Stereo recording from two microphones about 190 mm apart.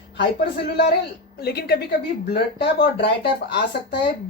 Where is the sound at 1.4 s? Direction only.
55° left (ahead or behind).